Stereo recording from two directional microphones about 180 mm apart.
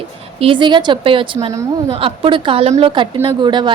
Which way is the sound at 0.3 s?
30° right (ahead or behind).